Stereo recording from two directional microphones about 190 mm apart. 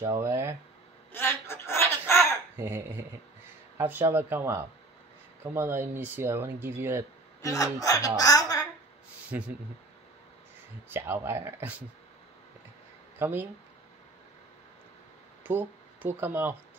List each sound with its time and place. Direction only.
0.0 s speech: 15° right (ahead or behind)
1.1 s a sound: 10° left (ahead or behind)
2.1 s a sound: 10° right (ahead or behind)
3.7 s speech: 10° right (ahead or behind)
7.4 s speech: 20° left (ahead or behind)
8.2 s a sound: 20° left (ahead or behind)
9.3 s speech: 10° right (ahead or behind)
10.9 s speech: 10° right (ahead or behind)
13.2 s speech: 10° right (ahead or behind)
15.4 s speech: 10° right (ahead or behind)